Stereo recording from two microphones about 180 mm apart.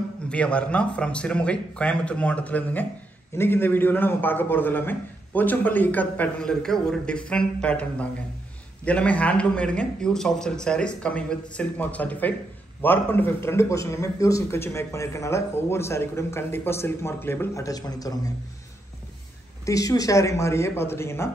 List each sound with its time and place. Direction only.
0.3 s a man's voice: 5° left (ahead or behind)
19.6 s a man's voice: 20° left (ahead or behind)